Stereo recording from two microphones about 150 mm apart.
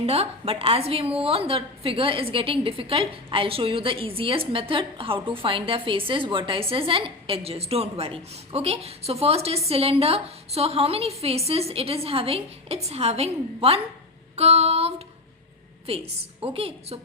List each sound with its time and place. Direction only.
0.0 s a woman's voice: 40° right (ahead or behind)
14.3 s female singing: 40° right (ahead or behind)
15.9 s a woman's voice: 40° right (ahead or behind)